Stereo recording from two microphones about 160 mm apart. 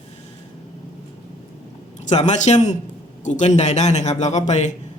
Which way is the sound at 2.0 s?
45° left (ahead or behind).